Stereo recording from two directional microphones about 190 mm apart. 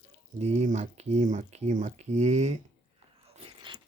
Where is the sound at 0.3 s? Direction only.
35° right (ahead or behind).